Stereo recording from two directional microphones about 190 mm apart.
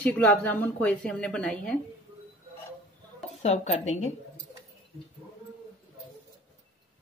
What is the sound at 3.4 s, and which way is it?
Speech, 35° left (ahead or behind).